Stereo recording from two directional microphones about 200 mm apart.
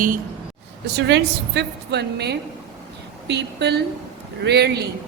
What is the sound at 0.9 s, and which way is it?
A woman's voice, 60° right (ahead or behind).